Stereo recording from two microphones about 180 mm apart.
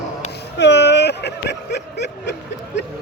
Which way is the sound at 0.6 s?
75° left (ahead or behind).